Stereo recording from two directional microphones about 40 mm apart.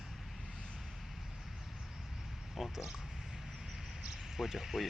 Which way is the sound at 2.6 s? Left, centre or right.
Centre.